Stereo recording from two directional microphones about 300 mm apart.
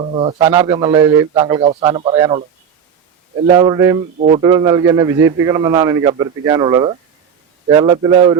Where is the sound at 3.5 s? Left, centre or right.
Centre.